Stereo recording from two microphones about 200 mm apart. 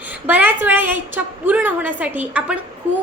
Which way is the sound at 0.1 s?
10° right (ahead or behind).